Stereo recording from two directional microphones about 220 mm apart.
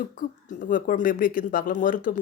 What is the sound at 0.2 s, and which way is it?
Speech, 35° left (ahead or behind).